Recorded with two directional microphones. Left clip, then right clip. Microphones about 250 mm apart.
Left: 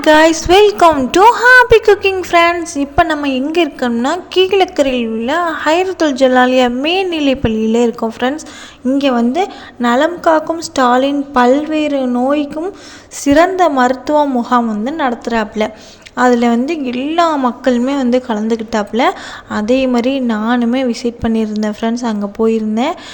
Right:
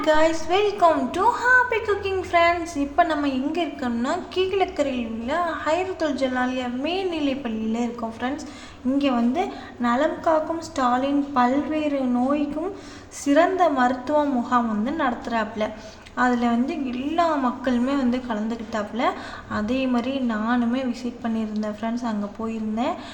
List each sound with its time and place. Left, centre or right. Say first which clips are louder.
0.0 s a woman's voice: left 11 dB; left